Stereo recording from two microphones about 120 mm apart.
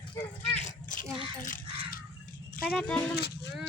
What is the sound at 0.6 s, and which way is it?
Children playing, 90° left.